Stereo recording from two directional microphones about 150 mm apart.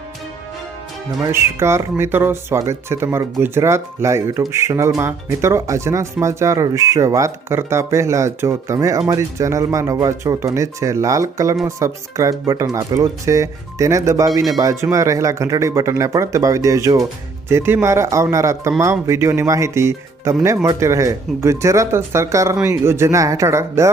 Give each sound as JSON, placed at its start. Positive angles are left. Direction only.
{"t": 1.2, "sound": "speech", "side_deg": -15}